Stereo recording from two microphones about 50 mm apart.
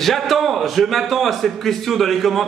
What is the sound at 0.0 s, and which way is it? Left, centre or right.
A man's voice, centre.